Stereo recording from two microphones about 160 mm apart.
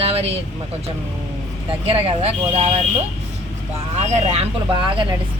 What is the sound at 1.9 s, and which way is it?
Speech, 40° right (ahead or behind).